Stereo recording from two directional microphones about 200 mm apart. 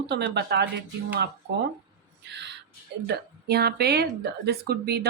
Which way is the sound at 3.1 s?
55° right (ahead or behind).